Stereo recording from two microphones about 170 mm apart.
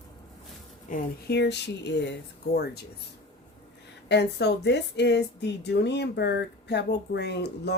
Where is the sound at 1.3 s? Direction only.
85° left; by 2.8 s 70° left (ahead or behind).